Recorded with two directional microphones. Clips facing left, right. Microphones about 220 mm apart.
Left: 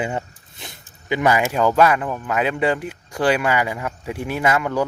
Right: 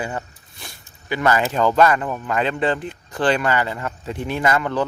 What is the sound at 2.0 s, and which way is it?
Speech, 5° right (ahead or behind).